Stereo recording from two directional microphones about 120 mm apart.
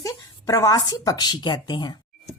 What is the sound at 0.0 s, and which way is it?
Speech, 30° left (ahead or behind).